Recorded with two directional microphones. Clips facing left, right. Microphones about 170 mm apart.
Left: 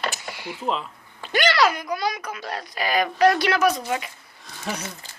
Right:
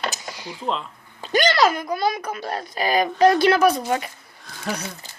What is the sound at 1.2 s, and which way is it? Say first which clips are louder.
Speech: right 2 dB; 40° right (ahead or behind).